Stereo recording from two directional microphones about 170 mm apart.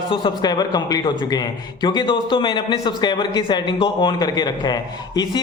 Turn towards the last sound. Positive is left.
turn(degrees=25)  # may be behind; listen again after turning